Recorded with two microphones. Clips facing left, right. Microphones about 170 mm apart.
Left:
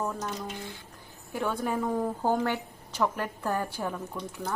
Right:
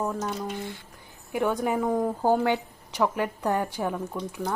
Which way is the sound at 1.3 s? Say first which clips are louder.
Right 4 dB; 15° right (ahead or behind).